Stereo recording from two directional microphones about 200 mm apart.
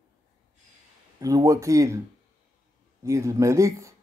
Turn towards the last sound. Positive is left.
turn(degrees=-15)  # may be behind; listen again after turning